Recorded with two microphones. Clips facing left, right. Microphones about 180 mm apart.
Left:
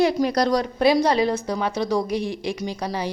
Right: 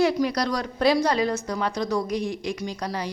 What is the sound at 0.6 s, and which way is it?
Speech, 20° left (ahead or behind).